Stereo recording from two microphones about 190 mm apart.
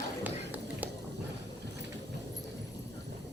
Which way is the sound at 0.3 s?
10° right (ahead or behind).